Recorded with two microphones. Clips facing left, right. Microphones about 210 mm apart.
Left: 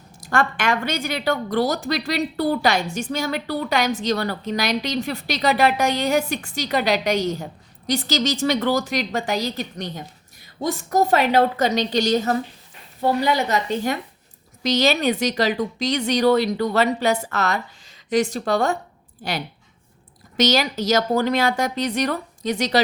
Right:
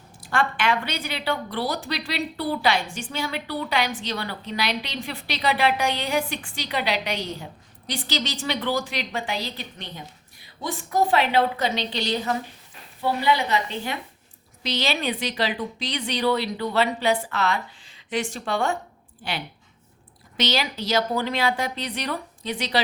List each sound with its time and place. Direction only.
0.2 s a woman's voice: 45° left (ahead or behind)